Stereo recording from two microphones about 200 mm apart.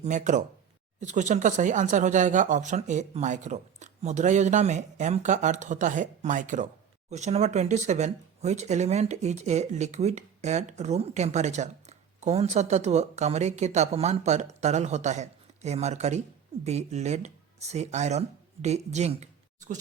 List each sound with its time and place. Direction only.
0.0 s speech: 35° right (ahead or behind)